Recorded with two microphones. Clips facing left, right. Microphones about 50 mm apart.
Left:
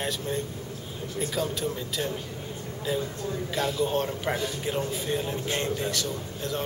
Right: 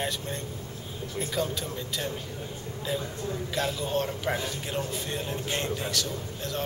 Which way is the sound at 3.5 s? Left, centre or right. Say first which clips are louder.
Left 3 dB; centre.